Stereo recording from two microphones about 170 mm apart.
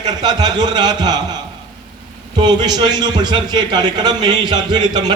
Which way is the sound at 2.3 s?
25° right (ahead or behind).